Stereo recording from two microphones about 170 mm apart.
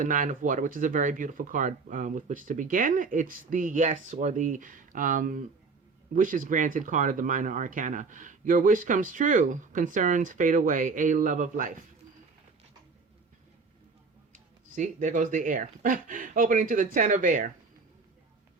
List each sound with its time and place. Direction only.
0.0 s speech: 50° right (ahead or behind)
14.3 s speech: 45° right (ahead or behind)